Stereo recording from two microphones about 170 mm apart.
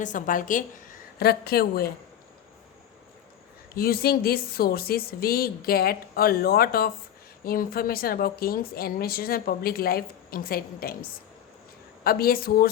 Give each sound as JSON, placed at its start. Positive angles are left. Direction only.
{"t": 0.0, "sound": "a woman's voice", "side_deg": 50}
{"t": 1.2, "sound": "speech", "side_deg": 65}
{"t": 3.8, "sound": "speech", "side_deg": 65}